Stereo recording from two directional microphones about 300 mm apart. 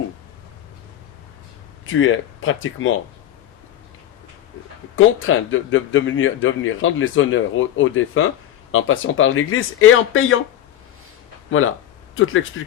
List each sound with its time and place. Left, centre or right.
1.9 s speech: left
4.9 s speech: left
12.1 s speech: left